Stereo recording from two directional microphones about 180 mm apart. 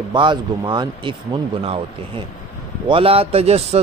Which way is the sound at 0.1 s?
25° right (ahead or behind).